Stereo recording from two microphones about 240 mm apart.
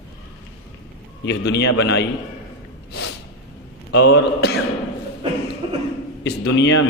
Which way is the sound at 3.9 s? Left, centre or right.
Left.